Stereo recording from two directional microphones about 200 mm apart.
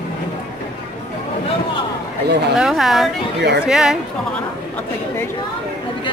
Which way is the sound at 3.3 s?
55° right (ahead or behind).